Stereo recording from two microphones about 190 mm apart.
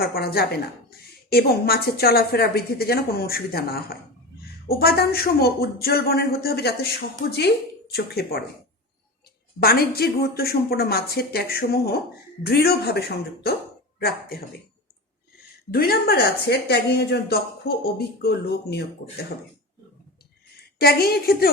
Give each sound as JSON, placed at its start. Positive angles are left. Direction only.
{"t": 0.0, "sound": "a woman's voice", "side_deg": 55}
{"t": 9.6, "sound": "speech", "side_deg": 55}
{"t": 15.7, "sound": "speech", "side_deg": 50}
{"t": 20.7, "sound": "a woman's voice", "side_deg": 55}